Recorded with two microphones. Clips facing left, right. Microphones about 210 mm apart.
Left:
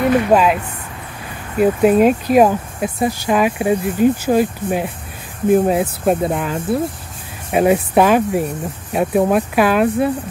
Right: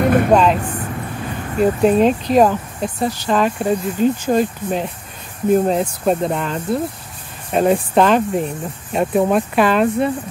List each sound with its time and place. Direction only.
0.0 s a sound: 50° right (ahead or behind)
0.3 s speech: 5° left (ahead or behind)
1.6 s speech: 10° left (ahead or behind)